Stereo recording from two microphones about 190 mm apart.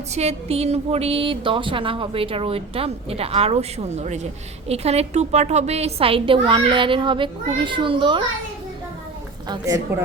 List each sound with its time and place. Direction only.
0.1 s a woman's voice: 35° right (ahead or behind)
9.9 s speech: 10° right (ahead or behind)